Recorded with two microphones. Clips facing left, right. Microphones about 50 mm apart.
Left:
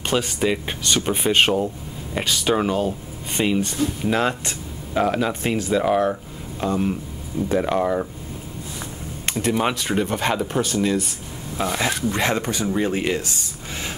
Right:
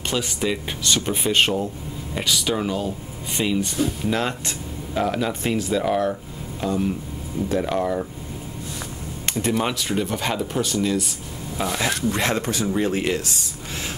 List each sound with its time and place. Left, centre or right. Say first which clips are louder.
0.1 s speech: left 4 dB; centre
3.7 s speech: left 1 dB; centre
9.2 s a sound: left 1 dB; centre
9.5 s speech: left 2 dB; centre
11.5 s speech: left 1 dB; centre